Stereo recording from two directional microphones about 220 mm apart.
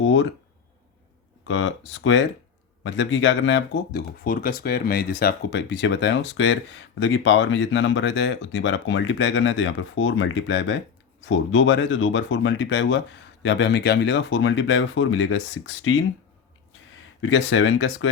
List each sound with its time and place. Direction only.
0.0 s speech: 60° left (ahead or behind)
1.5 s speech: 60° left (ahead or behind)
4.2 s speech: 40° left (ahead or behind); by 16.0 s 60° left (ahead or behind)
17.2 s speech: 60° left (ahead or behind)